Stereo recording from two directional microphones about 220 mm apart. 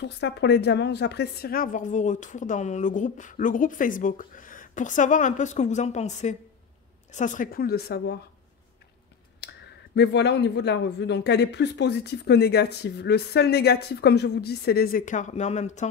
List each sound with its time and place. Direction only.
0.0 s a woman's voice: 50° left (ahead or behind)
9.4 s clicking: 50° left (ahead or behind)
9.9 s speech: 50° left (ahead or behind); by 15.9 s 30° left (ahead or behind)